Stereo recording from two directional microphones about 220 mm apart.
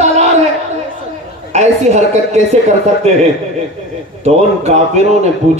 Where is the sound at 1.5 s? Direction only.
30° right (ahead or behind).